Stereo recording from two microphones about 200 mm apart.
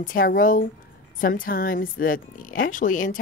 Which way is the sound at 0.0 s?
45° left (ahead or behind).